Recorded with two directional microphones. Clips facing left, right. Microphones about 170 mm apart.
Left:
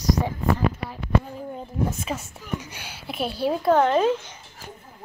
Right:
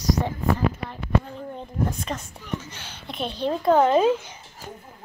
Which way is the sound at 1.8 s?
5° left (ahead or behind).